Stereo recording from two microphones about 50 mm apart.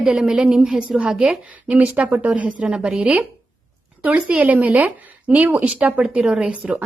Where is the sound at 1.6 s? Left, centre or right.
Right.